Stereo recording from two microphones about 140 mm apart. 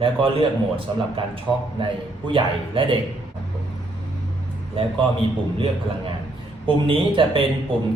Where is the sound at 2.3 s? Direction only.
40° right (ahead or behind).